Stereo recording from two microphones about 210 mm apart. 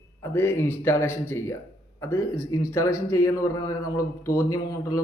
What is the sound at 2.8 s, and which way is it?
Speech, 90° left.